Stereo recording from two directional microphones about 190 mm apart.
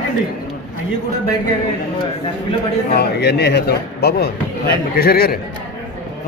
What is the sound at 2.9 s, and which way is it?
A man's voice, 60° left (ahead or behind).